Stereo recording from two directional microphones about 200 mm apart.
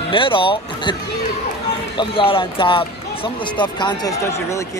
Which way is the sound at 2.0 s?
25° left (ahead or behind).